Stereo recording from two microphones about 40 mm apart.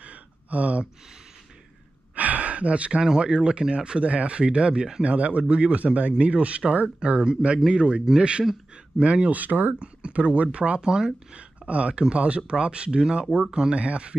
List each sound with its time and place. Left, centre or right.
0.0 s a sound: right
2.1 s gasp: right
3.0 s speech: centre; by 7.2 s right
7.2 s speech: right
9.4 s speech: right
9.8 s speech: right
11.3 s speech: right